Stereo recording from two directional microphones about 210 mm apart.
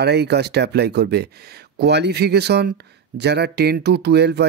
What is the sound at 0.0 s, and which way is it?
Speech, 50° right (ahead or behind).